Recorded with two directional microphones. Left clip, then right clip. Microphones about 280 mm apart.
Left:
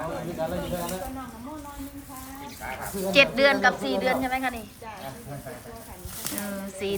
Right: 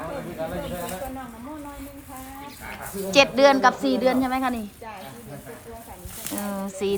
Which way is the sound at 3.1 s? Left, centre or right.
Centre.